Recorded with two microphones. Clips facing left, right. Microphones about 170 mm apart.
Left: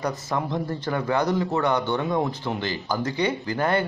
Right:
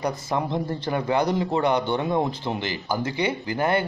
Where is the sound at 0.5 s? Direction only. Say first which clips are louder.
Right 1 dB; 25° right (ahead or behind).